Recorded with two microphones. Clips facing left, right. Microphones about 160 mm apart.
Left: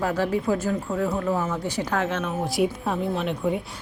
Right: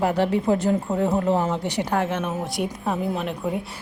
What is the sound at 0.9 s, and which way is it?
Speech, 30° right (ahead or behind).